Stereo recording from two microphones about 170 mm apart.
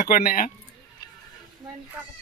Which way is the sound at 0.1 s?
55° left (ahead or behind).